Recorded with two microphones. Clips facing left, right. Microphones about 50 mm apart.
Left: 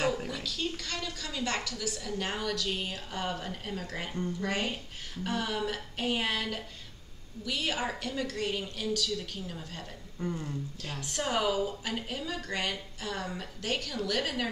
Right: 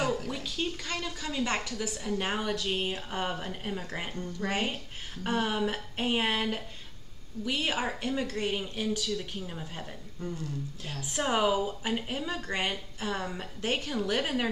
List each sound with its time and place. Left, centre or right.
0.3 s a woman's voice: right
10.2 s speech: left
11.1 s a woman's voice: right